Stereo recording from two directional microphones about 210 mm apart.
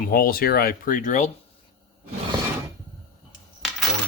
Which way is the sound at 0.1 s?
45° left (ahead or behind).